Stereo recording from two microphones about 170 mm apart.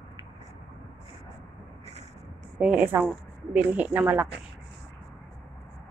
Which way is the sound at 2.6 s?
10° right (ahead or behind).